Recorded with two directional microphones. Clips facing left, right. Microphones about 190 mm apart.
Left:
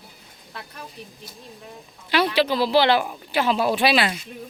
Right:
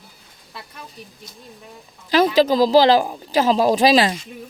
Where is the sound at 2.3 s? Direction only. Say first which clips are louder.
Right 6 dB; 40° right (ahead or behind).